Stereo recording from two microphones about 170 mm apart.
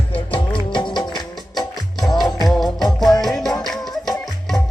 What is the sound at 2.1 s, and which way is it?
Music, centre (ahead or behind).